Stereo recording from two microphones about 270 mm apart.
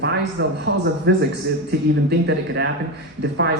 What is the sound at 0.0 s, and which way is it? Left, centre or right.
A man's voice, right.